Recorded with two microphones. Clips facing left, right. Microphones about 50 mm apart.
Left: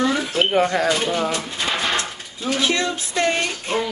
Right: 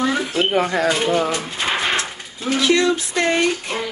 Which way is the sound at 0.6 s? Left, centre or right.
Right.